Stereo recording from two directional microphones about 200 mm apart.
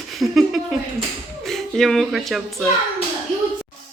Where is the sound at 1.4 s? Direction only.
Centre (ahead or behind).